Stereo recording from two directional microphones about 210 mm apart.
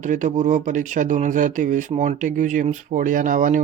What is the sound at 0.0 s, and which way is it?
Speech, 35° right (ahead or behind).